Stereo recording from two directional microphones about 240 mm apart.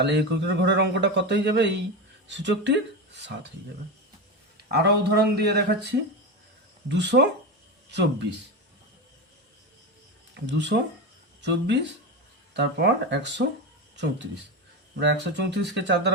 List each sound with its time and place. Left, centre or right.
0.0 s speech: right
4.5 s speech: right
6.9 s speech: right
10.3 s speech: right
14.9 s speech: right